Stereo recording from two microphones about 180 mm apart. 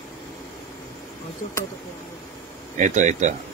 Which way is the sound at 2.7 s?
45° right (ahead or behind).